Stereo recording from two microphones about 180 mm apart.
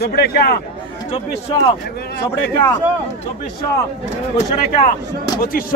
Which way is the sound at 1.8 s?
65° left (ahead or behind).